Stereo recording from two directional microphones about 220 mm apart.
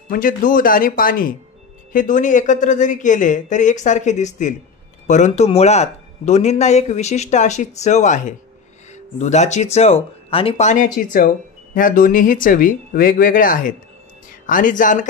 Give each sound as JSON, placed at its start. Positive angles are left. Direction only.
{"t": 0.1, "sound": "speech", "side_deg": 40}